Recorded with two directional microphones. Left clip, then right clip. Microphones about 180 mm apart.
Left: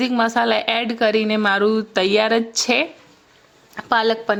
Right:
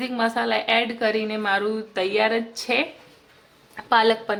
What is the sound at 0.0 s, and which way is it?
A woman's voice, 35° left (ahead or behind).